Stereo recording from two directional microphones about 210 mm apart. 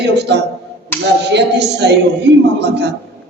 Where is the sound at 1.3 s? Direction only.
55° right (ahead or behind).